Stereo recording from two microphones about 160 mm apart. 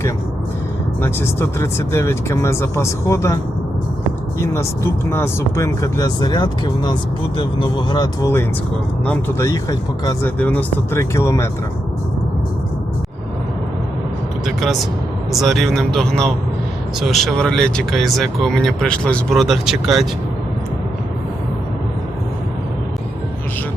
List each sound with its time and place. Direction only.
1.0 s speech: 15° left (ahead or behind)
4.5 s speech: 15° left (ahead or behind)
14.4 s vehicle: centre (ahead or behind)
15.3 s speech: centre (ahead or behind)